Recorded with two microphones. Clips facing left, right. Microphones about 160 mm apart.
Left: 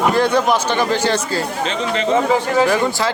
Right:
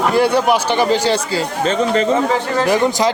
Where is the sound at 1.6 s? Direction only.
40° right (ahead or behind).